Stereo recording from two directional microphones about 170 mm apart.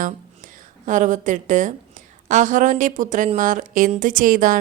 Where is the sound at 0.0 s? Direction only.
50° right (ahead or behind).